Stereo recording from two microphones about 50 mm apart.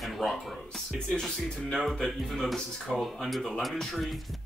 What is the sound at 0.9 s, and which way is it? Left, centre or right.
Speech, centre.